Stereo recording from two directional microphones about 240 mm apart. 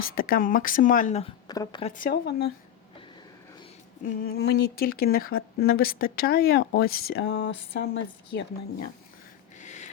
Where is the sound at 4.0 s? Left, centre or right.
Left.